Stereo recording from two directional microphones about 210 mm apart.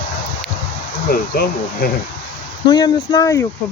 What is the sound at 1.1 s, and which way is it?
Speech, 45° left (ahead or behind).